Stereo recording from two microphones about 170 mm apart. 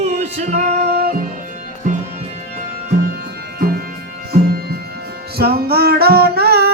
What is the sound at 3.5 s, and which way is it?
Music, 65° right (ahead or behind).